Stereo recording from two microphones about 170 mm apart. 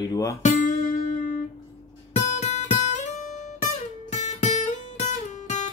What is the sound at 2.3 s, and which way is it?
Guitar, 40° left (ahead or behind).